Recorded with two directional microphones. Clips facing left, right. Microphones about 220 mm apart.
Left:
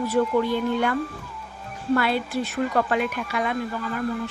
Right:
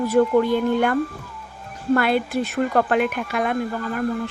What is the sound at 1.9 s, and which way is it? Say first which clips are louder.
Speech: right 3 dB; 50° right (ahead or behind).